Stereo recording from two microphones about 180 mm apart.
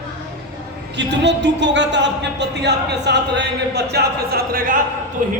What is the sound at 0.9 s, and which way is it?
A woman's voice, 75° right (ahead or behind).